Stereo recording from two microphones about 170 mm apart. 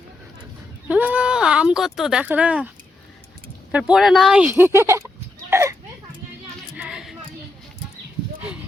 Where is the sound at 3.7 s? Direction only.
5° right (ahead or behind).